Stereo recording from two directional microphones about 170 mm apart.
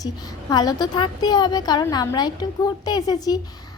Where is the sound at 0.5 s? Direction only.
25° left (ahead or behind).